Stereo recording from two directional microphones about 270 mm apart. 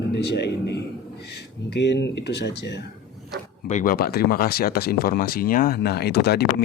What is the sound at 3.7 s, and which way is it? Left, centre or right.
Speech, left.